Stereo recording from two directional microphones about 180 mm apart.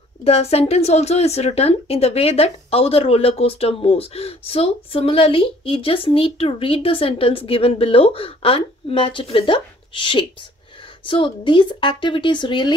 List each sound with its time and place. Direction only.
0.2 s speech: 35° left (ahead or behind)